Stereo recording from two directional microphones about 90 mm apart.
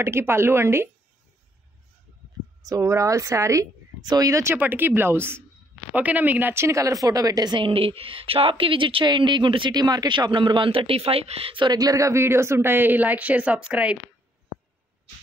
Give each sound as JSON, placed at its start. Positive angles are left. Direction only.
{"t": 0.0, "sound": "speech", "side_deg": -30}
{"t": 2.6, "sound": "a woman's voice", "side_deg": -40}
{"t": 4.0, "sound": "a woman's voice", "side_deg": -45}
{"t": 4.6, "sound": "a woman's voice", "side_deg": -20}
{"t": 7.6, "sound": "speech", "side_deg": -90}
{"t": 11.7, "sound": "speech", "side_deg": -40}